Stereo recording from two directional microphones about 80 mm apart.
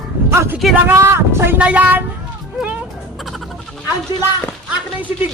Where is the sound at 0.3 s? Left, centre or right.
Right.